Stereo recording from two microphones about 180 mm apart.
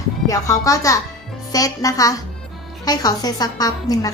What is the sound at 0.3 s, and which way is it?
A woman's voice, 20° left (ahead or behind).